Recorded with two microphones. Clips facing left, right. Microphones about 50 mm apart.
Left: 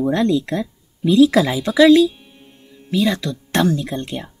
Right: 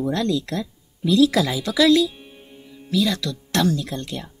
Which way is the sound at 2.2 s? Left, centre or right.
Centre.